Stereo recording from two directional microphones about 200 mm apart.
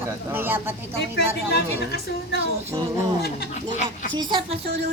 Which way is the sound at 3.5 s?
40° left (ahead or behind).